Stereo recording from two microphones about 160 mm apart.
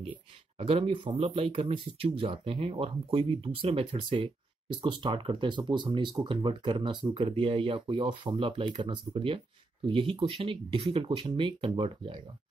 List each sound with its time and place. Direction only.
0.6 s speech: 35° right (ahead or behind)